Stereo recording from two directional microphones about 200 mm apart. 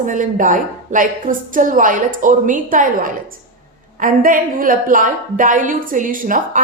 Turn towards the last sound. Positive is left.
turn(degrees=-40)  # may be behind; listen again after turning